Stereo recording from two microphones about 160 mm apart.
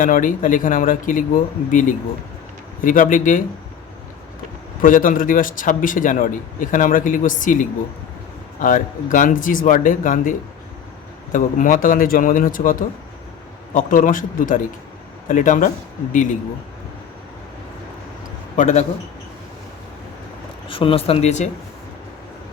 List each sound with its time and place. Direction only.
0.0 s speech: 55° left (ahead or behind)
4.8 s speech: 55° left (ahead or behind)
13.7 s speech: 55° left (ahead or behind)
18.5 s speech: 50° left (ahead or behind)
20.7 s speech: 35° left (ahead or behind)